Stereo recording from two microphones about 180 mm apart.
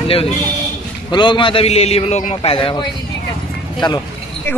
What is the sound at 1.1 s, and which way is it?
A man's voice, 25° left (ahead or behind).